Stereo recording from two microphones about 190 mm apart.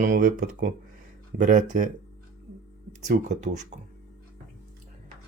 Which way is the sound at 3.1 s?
40° right (ahead or behind).